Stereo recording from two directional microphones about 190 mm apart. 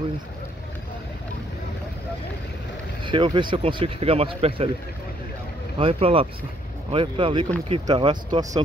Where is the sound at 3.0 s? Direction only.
25° right (ahead or behind).